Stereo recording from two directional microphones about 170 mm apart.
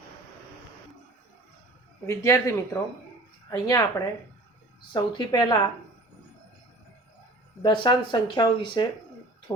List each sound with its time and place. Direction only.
2.0 s speech: 15° left (ahead or behind)
7.6 s speech: 30° left (ahead or behind)